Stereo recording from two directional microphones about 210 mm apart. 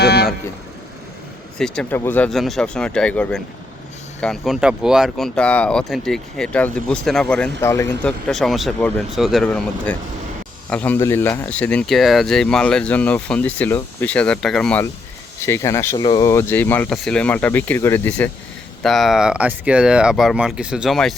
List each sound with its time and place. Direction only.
0.0 s vehicle: 50° left (ahead or behind)
1.5 s speech: 5° left (ahead or behind)